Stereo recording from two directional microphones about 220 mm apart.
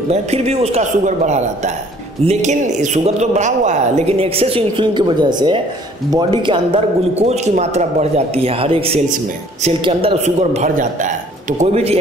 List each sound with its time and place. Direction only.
0.1 s a man's voice: 30° right (ahead or behind)